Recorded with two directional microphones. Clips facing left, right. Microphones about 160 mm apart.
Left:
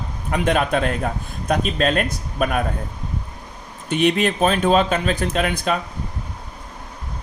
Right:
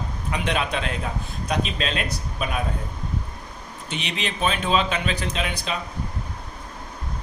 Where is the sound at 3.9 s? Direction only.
50° left (ahead or behind).